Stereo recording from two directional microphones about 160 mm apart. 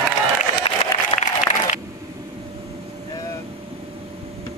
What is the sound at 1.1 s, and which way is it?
Applause, 35° left (ahead or behind).